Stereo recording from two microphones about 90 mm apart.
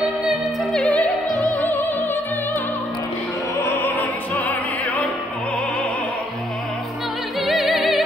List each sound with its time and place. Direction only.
0.7 s opera: 15° left (ahead or behind)
3.8 s opera: 20° left (ahead or behind)
7.3 s music: centre (ahead or behind)